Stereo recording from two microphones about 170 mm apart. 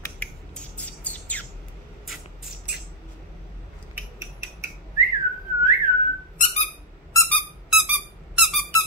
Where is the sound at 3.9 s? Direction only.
15° right (ahead or behind).